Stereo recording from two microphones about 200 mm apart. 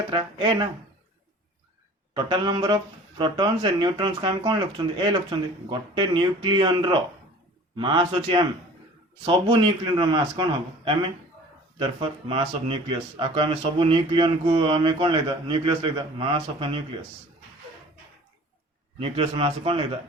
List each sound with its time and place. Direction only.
0.1 s speech: 20° right (ahead or behind)
2.1 s speech: 20° right (ahead or behind)
18.9 s speech: 30° right (ahead or behind)